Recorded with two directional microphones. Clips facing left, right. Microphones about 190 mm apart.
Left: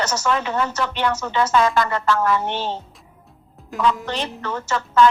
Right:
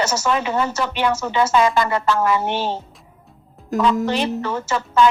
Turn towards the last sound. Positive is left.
turn(degrees=-15)  # may be behind; listen again after turning